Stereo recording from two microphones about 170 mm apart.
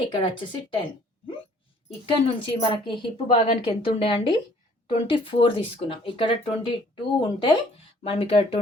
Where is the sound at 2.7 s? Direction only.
30° left (ahead or behind).